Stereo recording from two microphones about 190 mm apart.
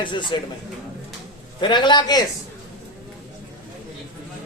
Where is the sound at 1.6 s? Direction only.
25° left (ahead or behind).